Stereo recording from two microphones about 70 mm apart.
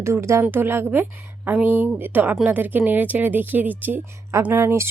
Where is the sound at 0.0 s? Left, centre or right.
Right.